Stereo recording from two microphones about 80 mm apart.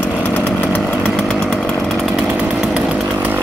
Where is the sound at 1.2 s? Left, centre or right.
Centre.